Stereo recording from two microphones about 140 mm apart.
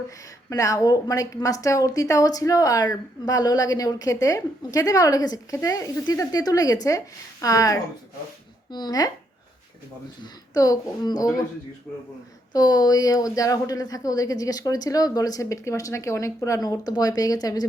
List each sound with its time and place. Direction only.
0.5 s a woman's voice: 25° left (ahead or behind)
10.5 s a woman's voice: 25° left (ahead or behind)
12.5 s a woman's voice: 25° left (ahead or behind)